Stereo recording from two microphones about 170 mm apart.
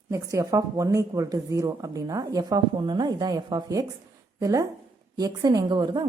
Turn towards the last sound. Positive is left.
turn(degrees=-25)  # may be behind; listen again after turning